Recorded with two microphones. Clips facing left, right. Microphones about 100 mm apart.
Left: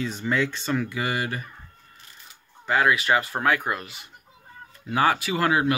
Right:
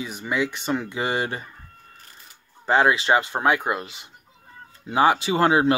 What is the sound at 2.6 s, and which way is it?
Speech, 25° right (ahead or behind).